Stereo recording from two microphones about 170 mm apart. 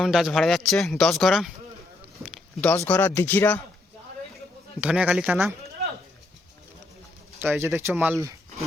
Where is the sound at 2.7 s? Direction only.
10° left (ahead or behind).